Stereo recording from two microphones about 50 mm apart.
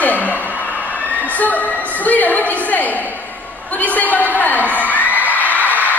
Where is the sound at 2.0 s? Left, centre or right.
Left.